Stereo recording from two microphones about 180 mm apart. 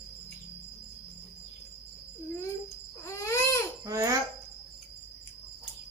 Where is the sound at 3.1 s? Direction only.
15° left (ahead or behind).